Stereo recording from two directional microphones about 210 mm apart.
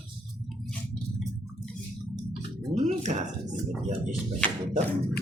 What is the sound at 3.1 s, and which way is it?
Speech, 40° right (ahead or behind).